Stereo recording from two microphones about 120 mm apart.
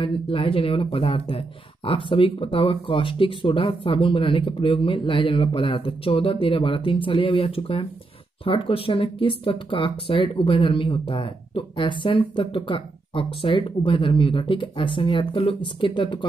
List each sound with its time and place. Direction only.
0.0 s speech: 50° left (ahead or behind)